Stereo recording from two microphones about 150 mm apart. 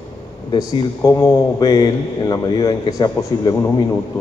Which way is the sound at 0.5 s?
25° left (ahead or behind).